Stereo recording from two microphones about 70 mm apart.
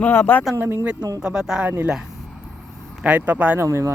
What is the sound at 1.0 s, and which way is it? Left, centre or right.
Speech, right.